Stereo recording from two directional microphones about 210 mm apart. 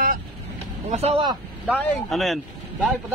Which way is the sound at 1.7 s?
5° left (ahead or behind).